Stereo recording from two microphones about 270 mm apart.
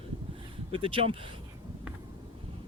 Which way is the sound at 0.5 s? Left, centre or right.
Centre.